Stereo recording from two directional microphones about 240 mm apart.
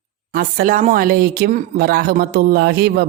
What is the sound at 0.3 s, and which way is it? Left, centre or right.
Speech, right.